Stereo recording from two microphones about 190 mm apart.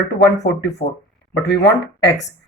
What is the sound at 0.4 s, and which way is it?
Speech, 65° left (ahead or behind).